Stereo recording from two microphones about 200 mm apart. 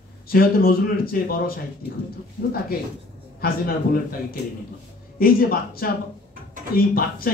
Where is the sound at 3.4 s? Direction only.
50° left (ahead or behind).